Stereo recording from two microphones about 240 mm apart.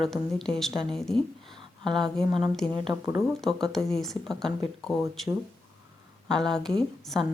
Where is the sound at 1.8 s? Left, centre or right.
Centre.